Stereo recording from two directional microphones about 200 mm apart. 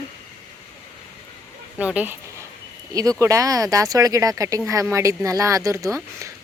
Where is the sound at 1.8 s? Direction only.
5° right (ahead or behind).